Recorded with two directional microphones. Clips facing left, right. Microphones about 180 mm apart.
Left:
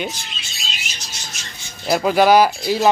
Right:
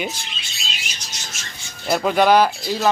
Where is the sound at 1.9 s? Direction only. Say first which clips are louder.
Left 2 dB; 5° left (ahead or behind).